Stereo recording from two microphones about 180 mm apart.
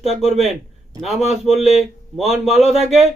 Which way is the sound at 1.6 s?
40° right (ahead or behind).